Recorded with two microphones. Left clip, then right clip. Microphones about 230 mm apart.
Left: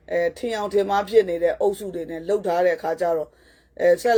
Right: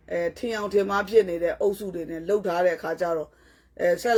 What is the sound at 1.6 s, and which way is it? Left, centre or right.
Speech, right.